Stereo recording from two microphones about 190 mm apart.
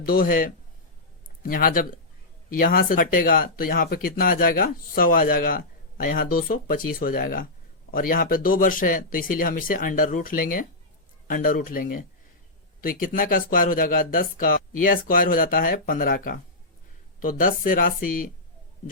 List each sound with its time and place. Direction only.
0.0 s speech: 50° left (ahead or behind)